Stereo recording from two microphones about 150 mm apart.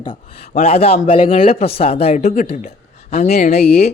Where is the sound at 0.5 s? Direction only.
40° left (ahead or behind).